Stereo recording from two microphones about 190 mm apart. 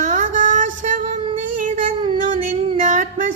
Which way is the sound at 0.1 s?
40° right (ahead or behind).